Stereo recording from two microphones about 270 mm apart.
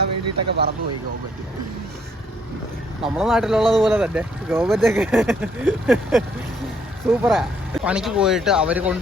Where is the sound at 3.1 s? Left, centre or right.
Centre.